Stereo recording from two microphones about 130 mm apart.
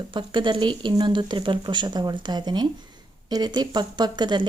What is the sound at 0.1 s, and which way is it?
Speech, 40° right (ahead or behind).